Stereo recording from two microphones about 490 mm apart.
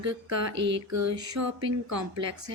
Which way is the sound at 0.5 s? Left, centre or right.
Right.